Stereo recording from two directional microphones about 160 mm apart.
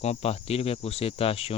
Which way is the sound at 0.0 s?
40° left (ahead or behind).